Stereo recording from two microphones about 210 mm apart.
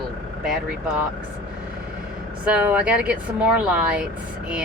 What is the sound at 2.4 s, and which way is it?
Speech, 5° right (ahead or behind).